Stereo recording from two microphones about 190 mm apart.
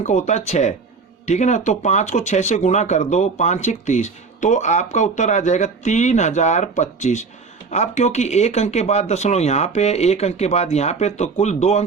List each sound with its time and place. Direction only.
0.0 s speech: 40° left (ahead or behind)